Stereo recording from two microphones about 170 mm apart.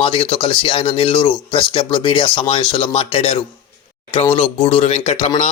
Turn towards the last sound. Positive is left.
turn(degrees=40)  # may be behind; listen again after turning